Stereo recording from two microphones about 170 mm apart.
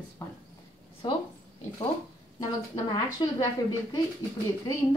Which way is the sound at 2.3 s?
20° left (ahead or behind).